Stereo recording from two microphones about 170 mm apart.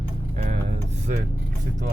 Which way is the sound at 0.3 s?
40° right (ahead or behind).